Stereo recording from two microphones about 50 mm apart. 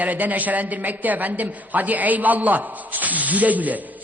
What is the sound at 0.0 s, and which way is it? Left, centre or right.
A man's voice, right.